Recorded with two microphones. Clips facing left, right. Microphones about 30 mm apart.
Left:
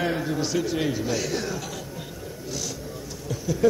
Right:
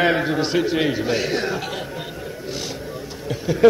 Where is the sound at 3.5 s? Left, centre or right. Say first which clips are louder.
Right 5 dB; right.